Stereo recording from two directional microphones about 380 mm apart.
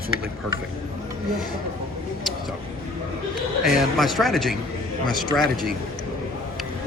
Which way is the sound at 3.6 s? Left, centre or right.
Centre.